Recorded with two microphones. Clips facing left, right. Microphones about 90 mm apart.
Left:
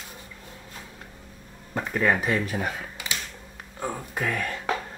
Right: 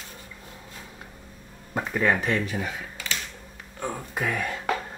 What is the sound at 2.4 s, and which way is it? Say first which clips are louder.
Speech: left 2 dB; 45° left (ahead or behind).